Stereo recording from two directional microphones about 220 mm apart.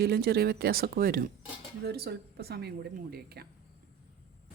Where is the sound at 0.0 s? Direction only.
45° right (ahead or behind).